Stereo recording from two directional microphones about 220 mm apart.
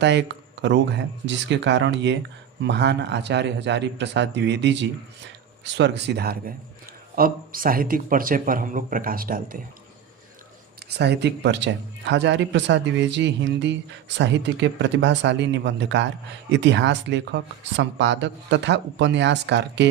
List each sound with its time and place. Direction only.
0.0 s speech: 50° right (ahead or behind)
10.8 s speech: 50° right (ahead or behind)